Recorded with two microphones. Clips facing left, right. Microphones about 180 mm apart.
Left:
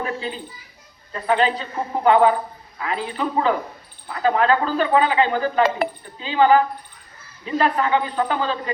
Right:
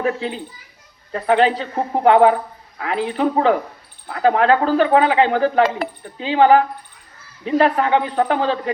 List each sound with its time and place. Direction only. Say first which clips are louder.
0.0 s speech: right 5 dB; 65° right (ahead or behind)